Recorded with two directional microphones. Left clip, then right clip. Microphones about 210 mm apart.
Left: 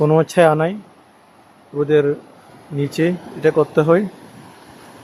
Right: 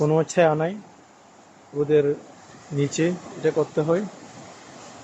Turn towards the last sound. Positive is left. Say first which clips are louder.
# left 8 dB
turn(degrees=30)  # may be behind; listen again after turning